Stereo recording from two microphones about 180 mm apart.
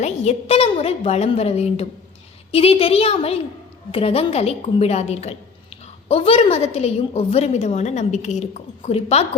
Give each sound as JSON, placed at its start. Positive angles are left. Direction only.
{"t": 0.0, "sound": "a woman's voice", "side_deg": 35}